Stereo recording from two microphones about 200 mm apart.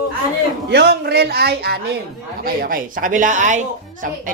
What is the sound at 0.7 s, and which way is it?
Speech, 55° right (ahead or behind).